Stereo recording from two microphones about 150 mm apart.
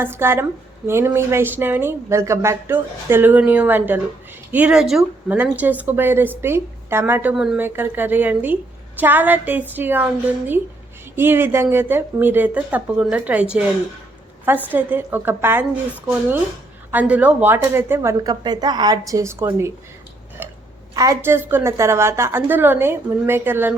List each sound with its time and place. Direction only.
0.0 s a woman's voice: 15° right (ahead or behind)
16.9 s a woman's voice: 10° right (ahead or behind)
20.4 s burping: 15° right (ahead or behind)
20.9 s a woman's voice: 25° right (ahead or behind)